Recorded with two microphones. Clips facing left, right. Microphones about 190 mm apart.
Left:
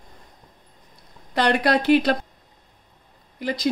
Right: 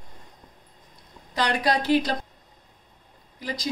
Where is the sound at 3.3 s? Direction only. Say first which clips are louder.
Left 7 dB; 60° left (ahead or behind).